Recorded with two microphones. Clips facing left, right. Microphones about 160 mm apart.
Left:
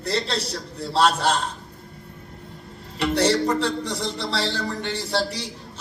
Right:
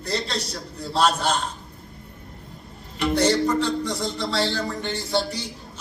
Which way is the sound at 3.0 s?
30° left (ahead or behind).